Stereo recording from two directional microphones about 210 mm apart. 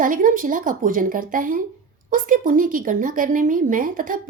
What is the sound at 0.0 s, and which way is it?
A woman's voice, 40° right (ahead or behind).